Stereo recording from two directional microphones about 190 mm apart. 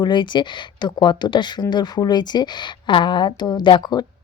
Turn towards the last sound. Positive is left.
turn(degrees=25)  # may be behind; listen again after turning